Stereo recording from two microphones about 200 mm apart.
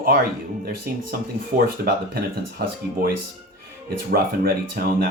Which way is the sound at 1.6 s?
50° right (ahead or behind).